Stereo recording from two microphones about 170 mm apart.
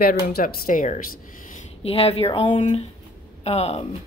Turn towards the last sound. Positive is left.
turn(degrees=40)  # may be behind; listen again after turning